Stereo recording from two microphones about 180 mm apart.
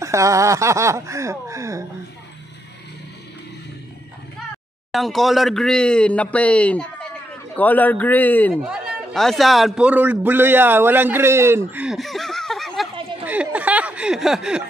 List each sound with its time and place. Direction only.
0.0 s speech: 15° right (ahead or behind)
4.9 s a man's voice: centre (ahead or behind)
13.2 s a sound: 10° right (ahead or behind)